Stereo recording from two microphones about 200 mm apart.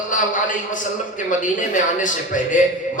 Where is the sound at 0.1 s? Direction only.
40° left (ahead or behind).